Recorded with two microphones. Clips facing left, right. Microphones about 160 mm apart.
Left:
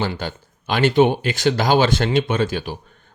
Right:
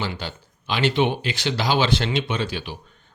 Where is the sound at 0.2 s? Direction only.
50° left (ahead or behind).